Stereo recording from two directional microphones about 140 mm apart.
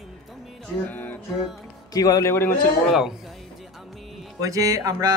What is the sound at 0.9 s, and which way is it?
Music, 10° left (ahead or behind).